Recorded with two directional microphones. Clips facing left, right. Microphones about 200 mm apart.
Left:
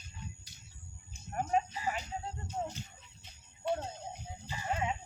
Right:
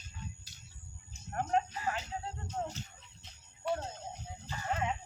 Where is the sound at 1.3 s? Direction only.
10° left (ahead or behind).